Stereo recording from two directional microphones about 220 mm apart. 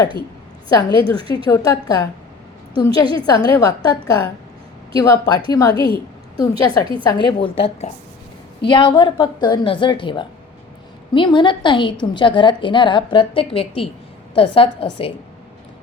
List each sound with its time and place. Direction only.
0.7 s a woman's voice: 20° left (ahead or behind)